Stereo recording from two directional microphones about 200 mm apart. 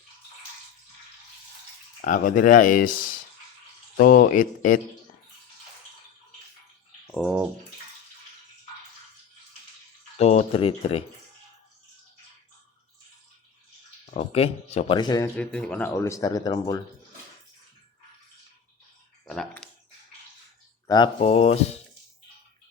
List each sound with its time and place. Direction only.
2.0 s speech: 40° left (ahead or behind)
10.2 s speech: 30° left (ahead or behind)
14.1 s speech: 30° left (ahead or behind)
15.4 s speech: 5° left (ahead or behind)
19.2 s speech: centre (ahead or behind)
20.8 s speech: 20° left (ahead or behind)